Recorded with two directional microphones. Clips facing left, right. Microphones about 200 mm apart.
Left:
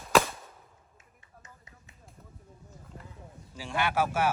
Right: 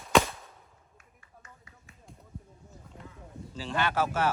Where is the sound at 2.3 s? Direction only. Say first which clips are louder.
Right 8 dB; centre (ahead or behind).